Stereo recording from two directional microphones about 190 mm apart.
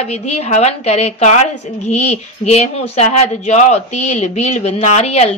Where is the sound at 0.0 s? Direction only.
35° left (ahead or behind).